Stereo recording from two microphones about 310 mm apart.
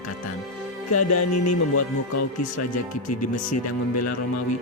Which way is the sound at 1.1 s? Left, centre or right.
Left.